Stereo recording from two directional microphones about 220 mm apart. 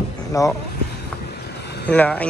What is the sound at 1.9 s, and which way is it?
Speech, 5° left (ahead or behind).